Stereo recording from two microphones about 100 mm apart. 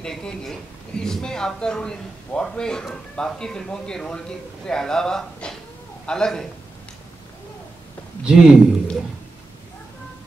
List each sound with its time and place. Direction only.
0.0 s a man's voice: 5° left (ahead or behind)
8.2 s a man's voice: 5° right (ahead or behind)